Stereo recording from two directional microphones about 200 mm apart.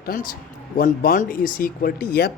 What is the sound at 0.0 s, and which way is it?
Speech, 45° left (ahead or behind).